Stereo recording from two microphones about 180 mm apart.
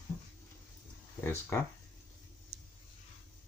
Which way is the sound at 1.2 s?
15° left (ahead or behind).